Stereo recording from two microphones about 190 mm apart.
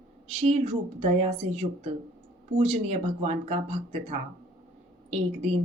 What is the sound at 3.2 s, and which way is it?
Speech, 35° right (ahead or behind).